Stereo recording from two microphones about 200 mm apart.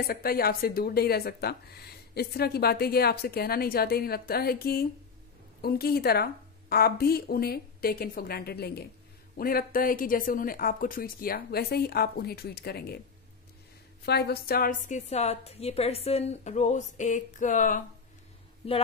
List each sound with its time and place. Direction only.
0.0 s speech: 50° left (ahead or behind)
14.0 s speech: 55° left (ahead or behind)
14.9 s a woman's voice: 35° left (ahead or behind)